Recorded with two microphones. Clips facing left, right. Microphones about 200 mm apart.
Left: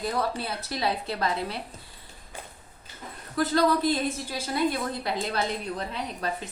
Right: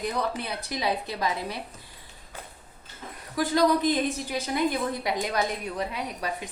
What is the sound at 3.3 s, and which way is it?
A woman's voice, 15° right (ahead or behind).